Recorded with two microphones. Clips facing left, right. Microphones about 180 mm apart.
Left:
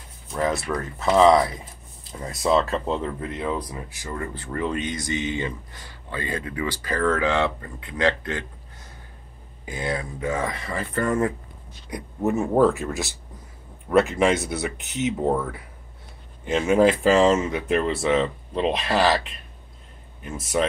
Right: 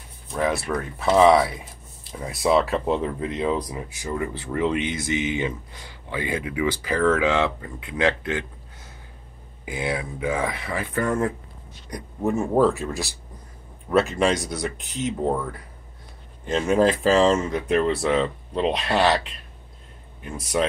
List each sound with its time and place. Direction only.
0.3 s a sound: 5° right (ahead or behind)
0.7 s speech: 10° right (ahead or behind)
9.7 s speech: 10° right (ahead or behind)
14.1 s speech: 5° left (ahead or behind)
14.8 s speech: 70° left (ahead or behind)
15.1 s speech: 5° left (ahead or behind)